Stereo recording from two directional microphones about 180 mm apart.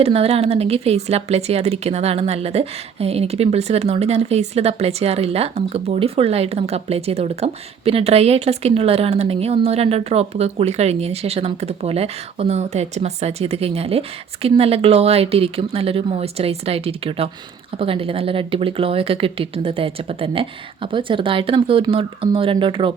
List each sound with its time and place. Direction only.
0.0 s a woman's voice: 35° right (ahead or behind)